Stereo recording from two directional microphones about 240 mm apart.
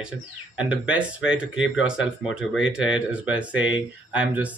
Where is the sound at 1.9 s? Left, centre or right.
Centre.